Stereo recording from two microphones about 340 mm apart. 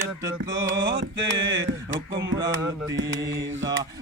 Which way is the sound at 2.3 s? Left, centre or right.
Centre.